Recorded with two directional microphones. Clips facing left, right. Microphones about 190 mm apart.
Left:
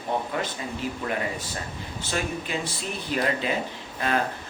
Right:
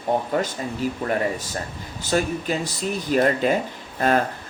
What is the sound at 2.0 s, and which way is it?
Speech, 40° right (ahead or behind).